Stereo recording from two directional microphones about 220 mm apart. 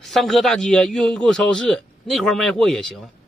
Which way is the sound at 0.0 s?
Centre (ahead or behind).